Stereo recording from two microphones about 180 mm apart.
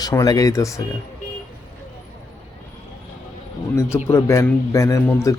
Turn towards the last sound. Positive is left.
turn(degrees=15)  # may be behind; listen again after turning